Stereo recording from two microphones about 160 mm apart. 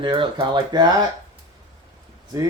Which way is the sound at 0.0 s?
30° right (ahead or behind).